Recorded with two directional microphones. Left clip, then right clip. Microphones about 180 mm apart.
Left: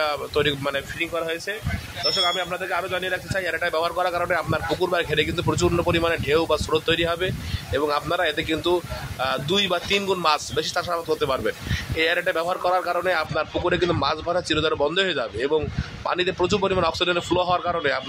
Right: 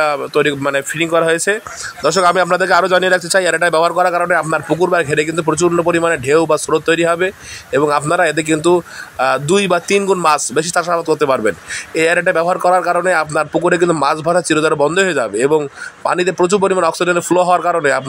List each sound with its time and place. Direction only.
0.0 s a man's voice: 35° right (ahead or behind)
0.9 s speech: 55° right (ahead or behind)
2.0 s speech: 70° right (ahead or behind); by 4.2 s 40° right (ahead or behind)
4.2 s a man's voice: 30° right (ahead or behind)